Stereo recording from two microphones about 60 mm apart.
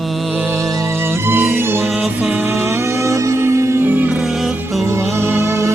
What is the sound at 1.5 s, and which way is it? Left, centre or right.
Music, right.